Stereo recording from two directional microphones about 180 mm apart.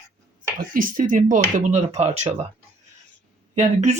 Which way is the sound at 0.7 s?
50° right (ahead or behind).